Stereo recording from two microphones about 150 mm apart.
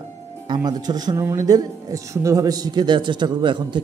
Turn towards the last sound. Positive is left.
turn(degrees=-30)  # may be behind; listen again after turning